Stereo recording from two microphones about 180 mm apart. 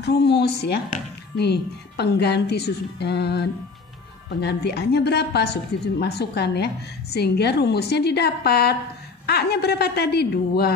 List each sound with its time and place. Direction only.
0.0 s a woman's voice: 65° left (ahead or behind)